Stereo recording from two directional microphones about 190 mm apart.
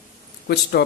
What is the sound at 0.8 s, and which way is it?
Speech, 60° left (ahead or behind).